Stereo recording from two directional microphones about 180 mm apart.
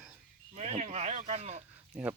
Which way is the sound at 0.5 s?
35° right (ahead or behind).